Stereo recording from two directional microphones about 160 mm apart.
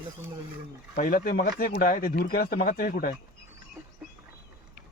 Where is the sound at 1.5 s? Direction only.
70° left (ahead or behind).